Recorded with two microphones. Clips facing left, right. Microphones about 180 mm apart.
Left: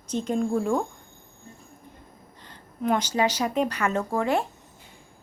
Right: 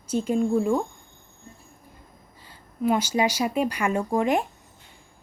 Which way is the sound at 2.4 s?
5° right (ahead or behind).